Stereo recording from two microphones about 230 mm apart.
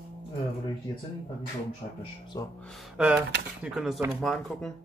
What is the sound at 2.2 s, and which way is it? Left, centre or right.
Speech, centre.